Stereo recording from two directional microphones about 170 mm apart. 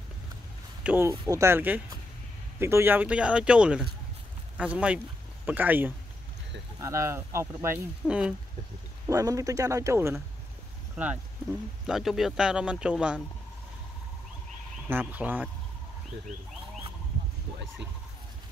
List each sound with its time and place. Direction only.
0.8 s speech: 10° right (ahead or behind)
9.0 s speech: 20° right (ahead or behind)
14.9 s speech: 10° right (ahead or behind)